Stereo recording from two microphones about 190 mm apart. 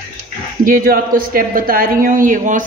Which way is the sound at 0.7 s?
50° right (ahead or behind).